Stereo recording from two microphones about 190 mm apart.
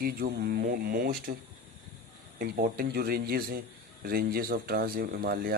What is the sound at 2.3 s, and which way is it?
Speech, 50° right (ahead or behind).